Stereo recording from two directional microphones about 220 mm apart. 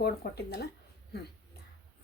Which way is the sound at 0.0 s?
45° left (ahead or behind).